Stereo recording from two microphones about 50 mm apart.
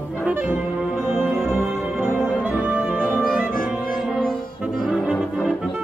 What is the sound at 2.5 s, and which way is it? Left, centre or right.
Music, right.